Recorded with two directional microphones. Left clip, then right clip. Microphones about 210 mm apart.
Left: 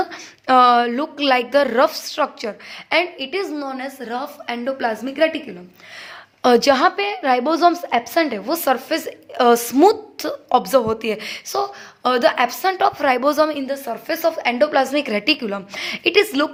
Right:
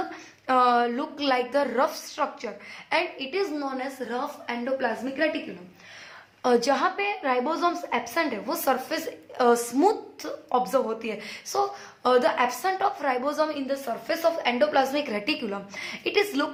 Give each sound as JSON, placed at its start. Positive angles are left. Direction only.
{"t": 0.1, "sound": "a woman's voice", "side_deg": 40}
{"t": 6.4, "sound": "a woman's voice", "side_deg": 40}